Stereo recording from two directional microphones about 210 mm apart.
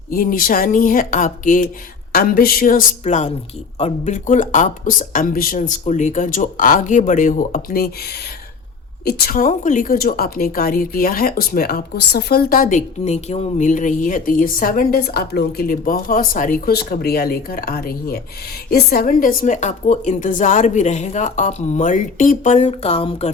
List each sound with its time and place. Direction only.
0.1 s a woman's voice: 45° left (ahead or behind); by 23.3 s 30° left (ahead or behind)